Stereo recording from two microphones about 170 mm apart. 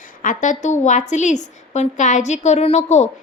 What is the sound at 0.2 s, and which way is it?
A woman's voice, 50° left (ahead or behind).